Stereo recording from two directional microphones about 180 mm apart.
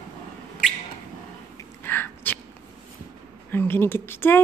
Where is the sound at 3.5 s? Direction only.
10° left (ahead or behind).